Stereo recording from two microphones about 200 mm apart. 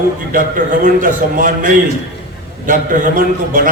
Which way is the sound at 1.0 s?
40° right (ahead or behind).